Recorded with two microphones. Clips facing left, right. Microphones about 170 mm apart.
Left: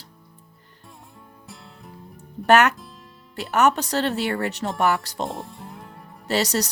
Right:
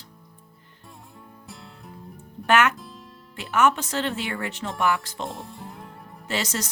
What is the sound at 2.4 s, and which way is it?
Speech, 40° left (ahead or behind).